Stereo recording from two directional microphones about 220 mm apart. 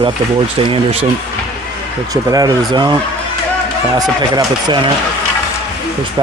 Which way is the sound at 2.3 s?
20° right (ahead or behind).